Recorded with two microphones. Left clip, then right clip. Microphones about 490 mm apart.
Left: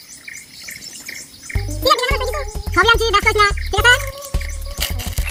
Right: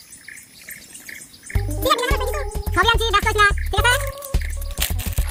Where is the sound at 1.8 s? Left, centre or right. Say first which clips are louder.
Left 4 dB; right.